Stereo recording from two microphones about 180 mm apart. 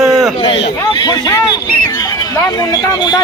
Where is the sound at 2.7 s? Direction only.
25° left (ahead or behind).